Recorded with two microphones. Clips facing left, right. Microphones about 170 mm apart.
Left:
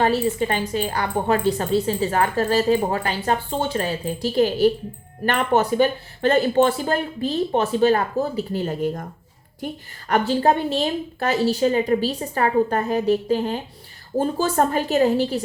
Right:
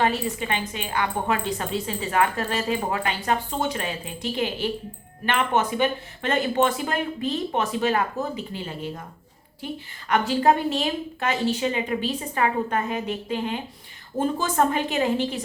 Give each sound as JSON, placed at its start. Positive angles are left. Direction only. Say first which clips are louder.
{"t": 0.0, "sound": "a woman's voice", "louder": "left 5 dB", "side_deg": 35}
{"t": 10.1, "sound": "a woman's voice", "louder": "left 2 dB", "side_deg": 30}